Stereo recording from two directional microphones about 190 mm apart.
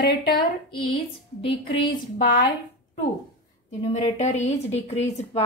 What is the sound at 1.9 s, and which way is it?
Speech, 45° left (ahead or behind).